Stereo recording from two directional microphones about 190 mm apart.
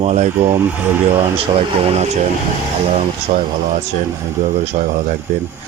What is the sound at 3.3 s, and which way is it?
Speech, 35° right (ahead or behind).